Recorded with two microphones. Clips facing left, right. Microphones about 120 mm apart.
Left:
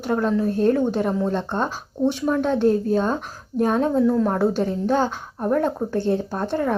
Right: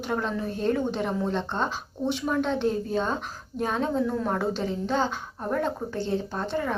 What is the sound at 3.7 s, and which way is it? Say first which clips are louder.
Speech: left 7 dB; 10° left (ahead or behind).